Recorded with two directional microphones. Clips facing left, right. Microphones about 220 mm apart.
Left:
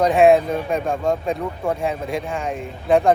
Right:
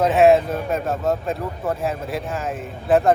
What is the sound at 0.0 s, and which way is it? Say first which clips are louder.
Speech: left 1 dB; centre (ahead or behind).